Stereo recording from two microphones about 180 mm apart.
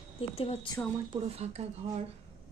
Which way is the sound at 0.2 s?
35° left (ahead or behind).